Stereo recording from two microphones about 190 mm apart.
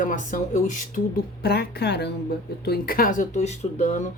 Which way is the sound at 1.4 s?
55° left (ahead or behind).